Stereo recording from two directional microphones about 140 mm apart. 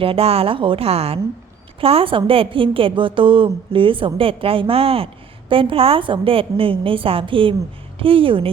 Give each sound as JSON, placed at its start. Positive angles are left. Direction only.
{"t": 0.0, "sound": "a woman's voice", "side_deg": -45}